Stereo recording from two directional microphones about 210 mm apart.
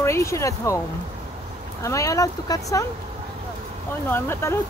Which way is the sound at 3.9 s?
10° left (ahead or behind).